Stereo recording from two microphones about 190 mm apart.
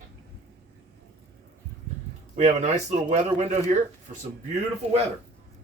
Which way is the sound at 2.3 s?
35° right (ahead or behind).